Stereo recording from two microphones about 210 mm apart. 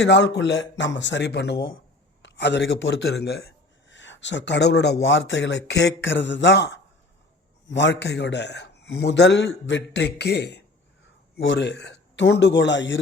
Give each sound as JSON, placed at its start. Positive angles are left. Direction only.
{"t": 0.0, "sound": "a man's voice", "side_deg": 55}